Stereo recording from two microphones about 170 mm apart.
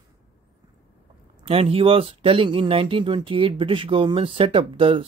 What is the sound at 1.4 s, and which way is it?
Speech, 35° right (ahead or behind).